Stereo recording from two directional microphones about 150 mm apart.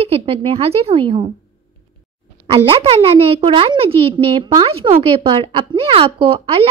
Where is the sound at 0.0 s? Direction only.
40° right (ahead or behind).